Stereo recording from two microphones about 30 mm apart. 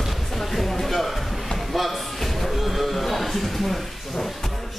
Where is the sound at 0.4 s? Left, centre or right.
Centre.